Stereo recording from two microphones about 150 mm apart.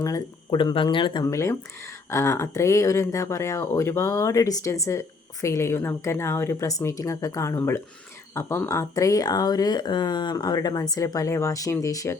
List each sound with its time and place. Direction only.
0.0 s speech: 25° left (ahead or behind)
1.2 s speech: 20° left (ahead or behind)